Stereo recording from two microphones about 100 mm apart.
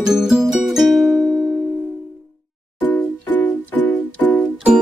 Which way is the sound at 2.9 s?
20° left (ahead or behind).